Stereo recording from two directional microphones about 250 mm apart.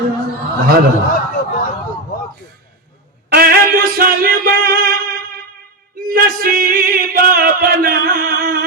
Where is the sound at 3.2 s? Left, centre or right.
Right.